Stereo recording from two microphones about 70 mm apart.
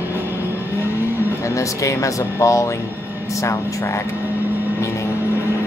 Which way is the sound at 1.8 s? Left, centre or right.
Left.